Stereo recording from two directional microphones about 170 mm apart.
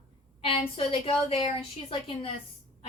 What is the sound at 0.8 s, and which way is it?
A woman's voice, 35° left (ahead or behind).